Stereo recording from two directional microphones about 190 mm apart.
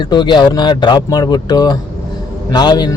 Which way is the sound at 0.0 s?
25° left (ahead or behind).